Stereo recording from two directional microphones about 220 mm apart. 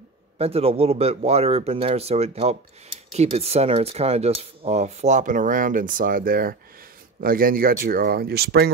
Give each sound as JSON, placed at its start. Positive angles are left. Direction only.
{"t": 0.4, "sound": "speech", "side_deg": -25}